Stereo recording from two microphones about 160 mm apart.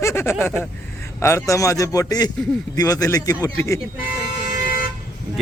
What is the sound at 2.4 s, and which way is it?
Speech, 5° left (ahead or behind).